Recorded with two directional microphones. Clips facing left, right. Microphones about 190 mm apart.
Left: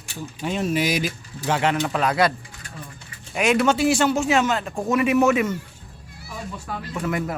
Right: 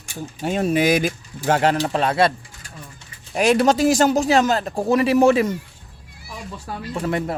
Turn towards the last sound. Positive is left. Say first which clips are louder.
# right 2 dB
turn(degrees=-30)  # may be behind; listen again after turning